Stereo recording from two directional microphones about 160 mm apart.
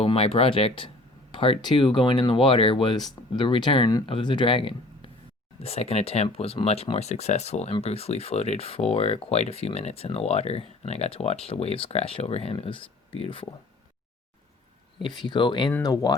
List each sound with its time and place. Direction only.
0.0 s speech: 35° left (ahead or behind)
15.0 s speech: 30° left (ahead or behind)